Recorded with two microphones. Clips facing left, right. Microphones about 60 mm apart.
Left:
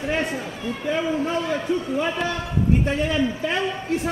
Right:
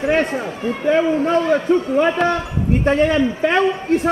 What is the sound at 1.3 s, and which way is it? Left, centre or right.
A man's voice, right.